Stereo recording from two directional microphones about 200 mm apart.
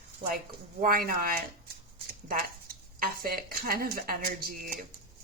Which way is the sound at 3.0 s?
45° right (ahead or behind).